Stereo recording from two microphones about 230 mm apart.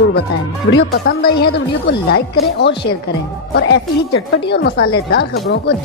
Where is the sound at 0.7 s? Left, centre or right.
Left.